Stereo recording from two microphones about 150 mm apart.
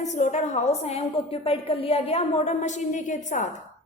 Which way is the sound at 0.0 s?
50° left (ahead or behind).